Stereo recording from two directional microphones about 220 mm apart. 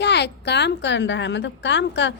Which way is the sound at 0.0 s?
50° left (ahead or behind).